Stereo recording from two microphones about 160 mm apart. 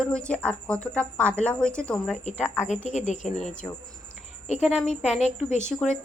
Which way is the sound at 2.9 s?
45° left (ahead or behind).